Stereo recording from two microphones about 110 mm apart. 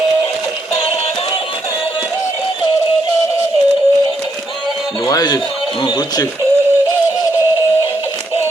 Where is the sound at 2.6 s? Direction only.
55° left (ahead or behind).